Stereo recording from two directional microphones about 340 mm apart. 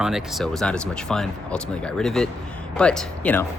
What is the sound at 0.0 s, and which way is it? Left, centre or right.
Speech, centre.